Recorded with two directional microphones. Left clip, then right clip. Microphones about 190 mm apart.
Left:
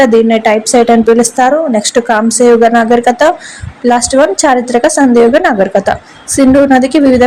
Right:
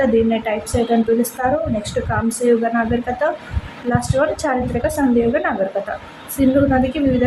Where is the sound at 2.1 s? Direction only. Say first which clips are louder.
Left 13 dB; 40° left (ahead or behind).